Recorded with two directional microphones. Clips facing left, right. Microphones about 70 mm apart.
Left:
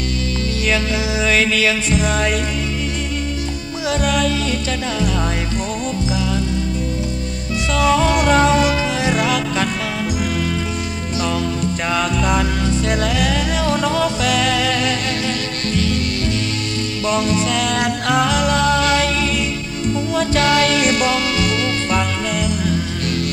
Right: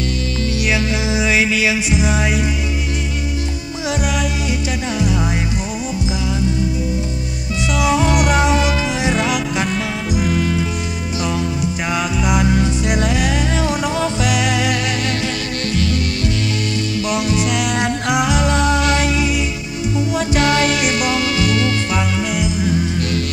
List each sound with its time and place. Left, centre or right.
0.6 s music: centre
3.8 s music: centre
7.7 s music: centre
11.6 s music: centre
17.1 s music: centre
20.8 s music: centre